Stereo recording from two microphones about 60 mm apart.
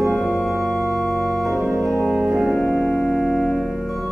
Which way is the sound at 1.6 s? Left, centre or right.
Right.